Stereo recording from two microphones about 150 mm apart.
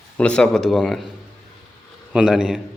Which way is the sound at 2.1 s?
5° right (ahead or behind).